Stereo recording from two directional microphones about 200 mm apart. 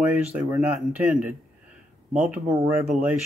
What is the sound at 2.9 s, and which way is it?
Speech, 5° right (ahead or behind).